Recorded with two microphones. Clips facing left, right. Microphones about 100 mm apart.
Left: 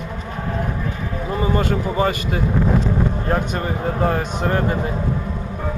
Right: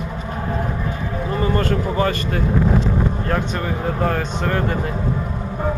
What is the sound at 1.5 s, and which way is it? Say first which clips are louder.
Speech: left 1 dB; 10° left (ahead or behind).